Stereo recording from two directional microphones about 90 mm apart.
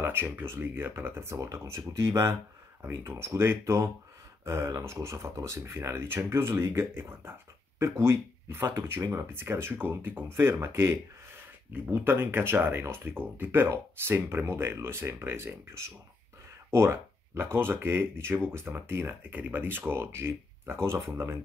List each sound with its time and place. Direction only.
0.0 s speech: 25° right (ahead or behind)